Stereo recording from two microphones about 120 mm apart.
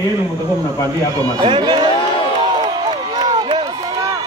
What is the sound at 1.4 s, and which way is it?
Speech, 40° right (ahead or behind).